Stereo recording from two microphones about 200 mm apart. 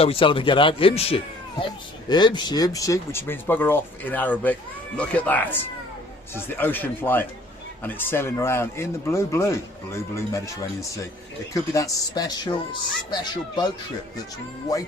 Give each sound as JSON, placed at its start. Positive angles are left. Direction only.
{"t": 0.0, "sound": "speech", "side_deg": 25}